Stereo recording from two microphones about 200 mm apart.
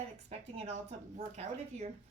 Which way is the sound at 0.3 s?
30° right (ahead or behind).